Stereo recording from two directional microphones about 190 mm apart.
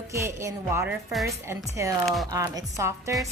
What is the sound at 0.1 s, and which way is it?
Speech, 15° right (ahead or behind).